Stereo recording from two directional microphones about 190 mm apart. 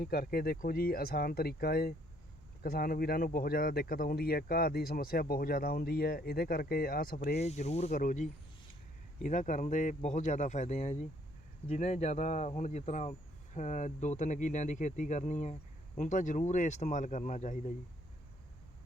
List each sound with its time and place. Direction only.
0.0 s speech: 55° left (ahead or behind)
7.3 s speech: 35° left (ahead or behind)